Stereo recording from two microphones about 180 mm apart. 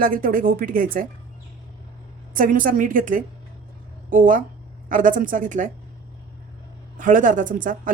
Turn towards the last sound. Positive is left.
turn(degrees=-50)  # may be behind; listen again after turning